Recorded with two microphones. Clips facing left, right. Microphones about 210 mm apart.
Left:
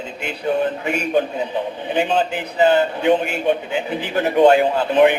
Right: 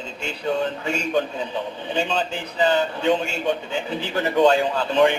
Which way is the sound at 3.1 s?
60° left (ahead or behind).